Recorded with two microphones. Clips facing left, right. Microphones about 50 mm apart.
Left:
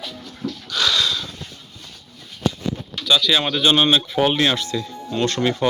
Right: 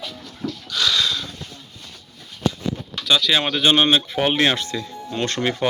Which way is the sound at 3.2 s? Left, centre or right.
Right.